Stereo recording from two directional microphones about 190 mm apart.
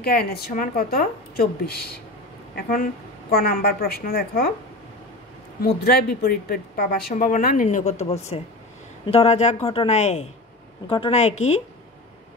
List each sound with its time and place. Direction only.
0.0 s a woman's voice: 55° left (ahead or behind)
5.6 s a woman's voice: 55° left (ahead or behind); by 11.3 s 35° left (ahead or behind)